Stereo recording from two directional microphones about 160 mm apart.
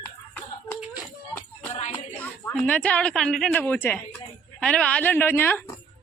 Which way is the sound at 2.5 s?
5° left (ahead or behind).